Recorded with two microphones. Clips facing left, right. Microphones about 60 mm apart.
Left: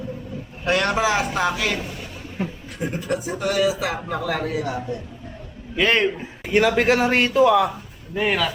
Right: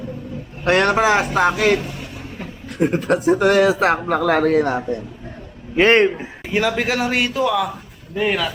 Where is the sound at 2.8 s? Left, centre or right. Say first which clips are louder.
Right 8 dB; right.